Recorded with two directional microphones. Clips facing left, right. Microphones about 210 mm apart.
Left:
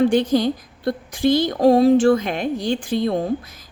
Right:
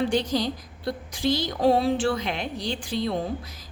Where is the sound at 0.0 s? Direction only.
50° left (ahead or behind).